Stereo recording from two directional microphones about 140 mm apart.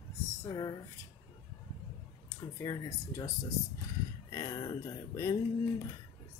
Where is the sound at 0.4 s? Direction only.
25° left (ahead or behind).